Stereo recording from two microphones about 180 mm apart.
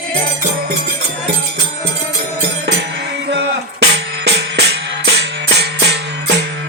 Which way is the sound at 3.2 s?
75° right (ahead or behind).